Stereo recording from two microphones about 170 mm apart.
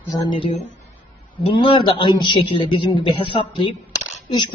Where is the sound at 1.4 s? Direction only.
30° left (ahead or behind).